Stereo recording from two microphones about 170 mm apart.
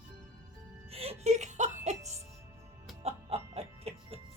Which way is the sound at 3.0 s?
35° right (ahead or behind).